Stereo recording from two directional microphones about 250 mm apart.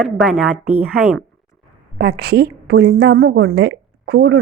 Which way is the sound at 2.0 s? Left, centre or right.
Right.